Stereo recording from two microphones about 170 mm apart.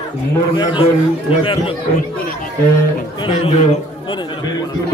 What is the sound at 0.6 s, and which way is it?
Speech, 30° left (ahead or behind).